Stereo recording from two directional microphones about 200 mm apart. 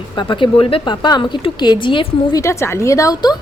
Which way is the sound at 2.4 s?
15° left (ahead or behind).